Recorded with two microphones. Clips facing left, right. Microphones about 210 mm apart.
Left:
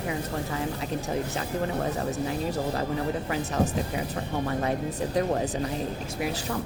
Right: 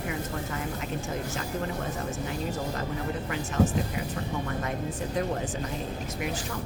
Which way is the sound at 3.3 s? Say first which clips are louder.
Right 3 dB; 35° left (ahead or behind).